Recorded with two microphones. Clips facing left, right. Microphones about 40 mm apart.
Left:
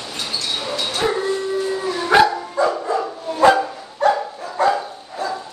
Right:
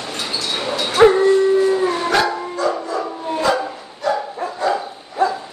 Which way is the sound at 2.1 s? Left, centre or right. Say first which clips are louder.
Left 3 dB; left.